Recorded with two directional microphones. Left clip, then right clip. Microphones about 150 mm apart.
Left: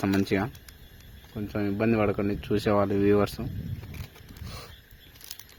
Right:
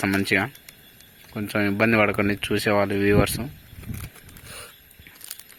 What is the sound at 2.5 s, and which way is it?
Speech, 15° left (ahead or behind).